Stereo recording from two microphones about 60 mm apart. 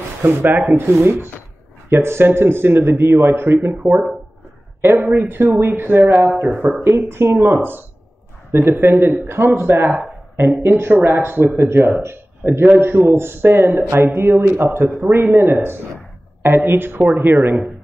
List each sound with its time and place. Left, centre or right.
0.2 s speech: right
4.8 s speech: right